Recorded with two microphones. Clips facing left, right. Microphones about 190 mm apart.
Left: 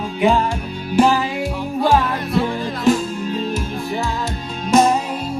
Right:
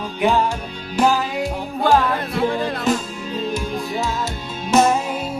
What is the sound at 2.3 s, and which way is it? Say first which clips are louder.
Music: left 1 dB; 60° right (ahead or behind).